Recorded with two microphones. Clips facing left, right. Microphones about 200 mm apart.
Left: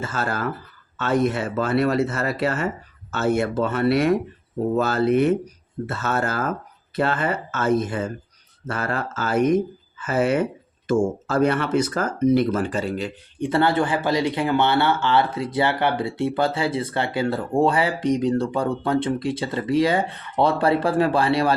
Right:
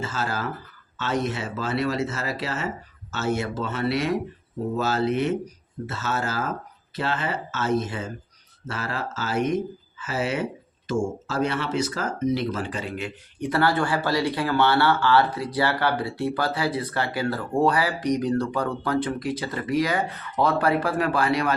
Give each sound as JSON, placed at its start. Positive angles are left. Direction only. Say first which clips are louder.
{"t": 0.0, "sound": "speech", "louder": "left 3 dB", "side_deg": 55}
{"t": 13.4, "sound": "speech", "louder": "left 3 dB", "side_deg": 25}